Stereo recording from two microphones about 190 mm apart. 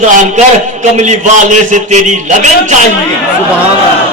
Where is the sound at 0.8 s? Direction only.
40° right (ahead or behind).